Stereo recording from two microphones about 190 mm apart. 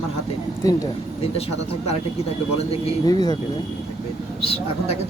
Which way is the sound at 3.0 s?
20° left (ahead or behind).